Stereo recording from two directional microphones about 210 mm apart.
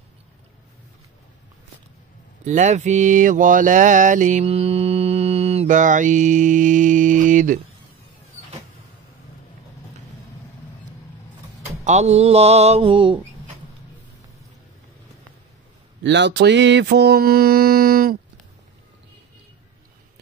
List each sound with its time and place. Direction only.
2.4 s mantra: 35° right (ahead or behind)
11.8 s mantra: 30° right (ahead or behind)
16.0 s mantra: 55° right (ahead or behind)